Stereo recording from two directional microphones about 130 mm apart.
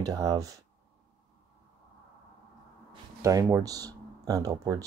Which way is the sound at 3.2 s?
30° right (ahead or behind).